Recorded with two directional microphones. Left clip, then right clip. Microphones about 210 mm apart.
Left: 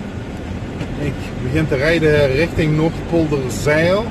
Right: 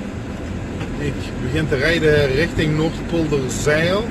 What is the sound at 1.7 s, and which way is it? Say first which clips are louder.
Speech: left 1 dB; 25° left (ahead or behind).